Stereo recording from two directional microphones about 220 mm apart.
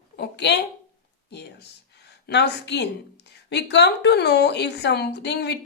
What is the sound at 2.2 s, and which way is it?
A woman's voice, 50° left (ahead or behind).